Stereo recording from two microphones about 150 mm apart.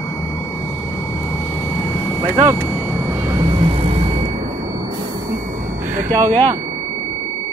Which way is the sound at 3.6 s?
40° right (ahead or behind).